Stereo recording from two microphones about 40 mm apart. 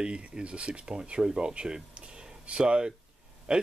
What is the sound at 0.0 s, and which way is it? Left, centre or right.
Speech, right.